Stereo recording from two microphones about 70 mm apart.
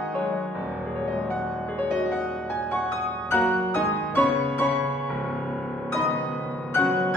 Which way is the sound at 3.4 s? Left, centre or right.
Left.